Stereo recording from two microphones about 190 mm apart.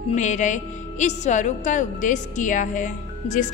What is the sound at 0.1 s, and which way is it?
A woman's voice, 40° left (ahead or behind).